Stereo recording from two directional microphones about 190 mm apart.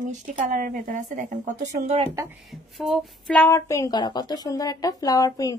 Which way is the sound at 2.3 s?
Centre (ahead or behind).